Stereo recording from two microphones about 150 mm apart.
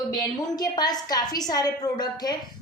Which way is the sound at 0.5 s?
25° left (ahead or behind).